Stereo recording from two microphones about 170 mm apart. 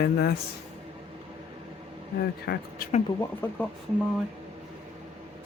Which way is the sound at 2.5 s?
90° left.